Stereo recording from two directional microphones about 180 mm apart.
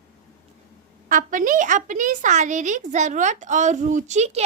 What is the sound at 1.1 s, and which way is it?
A woman's voice, 45° right (ahead or behind).